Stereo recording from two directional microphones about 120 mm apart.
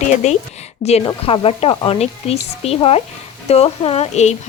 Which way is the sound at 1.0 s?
50° left (ahead or behind).